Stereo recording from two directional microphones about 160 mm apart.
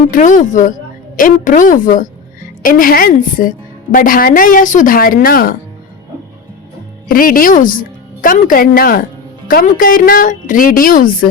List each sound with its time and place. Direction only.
0.1 s speech: 55° left (ahead or behind)
7.1 s speech: 65° left (ahead or behind)